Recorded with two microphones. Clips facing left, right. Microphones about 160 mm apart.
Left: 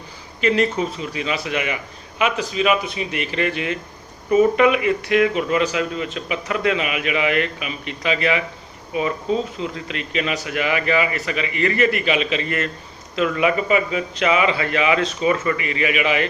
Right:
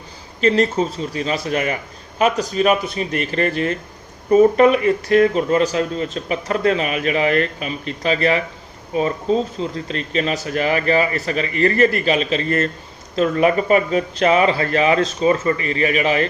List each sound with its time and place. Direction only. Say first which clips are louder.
0.4 s speech: right 2 dB; 35° right (ahead or behind)